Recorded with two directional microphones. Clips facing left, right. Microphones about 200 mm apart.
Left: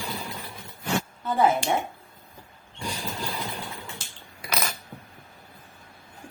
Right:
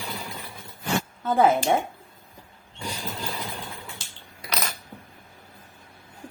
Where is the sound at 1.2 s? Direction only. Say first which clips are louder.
Right 3 dB; 50° right (ahead or behind).